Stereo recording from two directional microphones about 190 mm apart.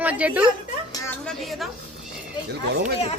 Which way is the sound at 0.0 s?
10° right (ahead or behind).